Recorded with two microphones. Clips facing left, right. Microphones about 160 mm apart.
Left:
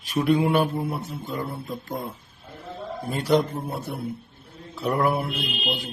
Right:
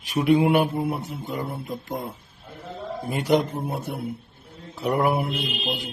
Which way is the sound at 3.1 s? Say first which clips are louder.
Even; 15° right (ahead or behind).